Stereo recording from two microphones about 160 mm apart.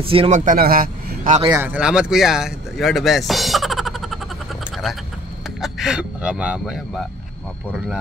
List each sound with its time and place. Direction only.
0.0 s speech: 35° right (ahead or behind)
0.3 s a man's voice: 60° right (ahead or behind)
1.5 s speech: 10° right (ahead or behind)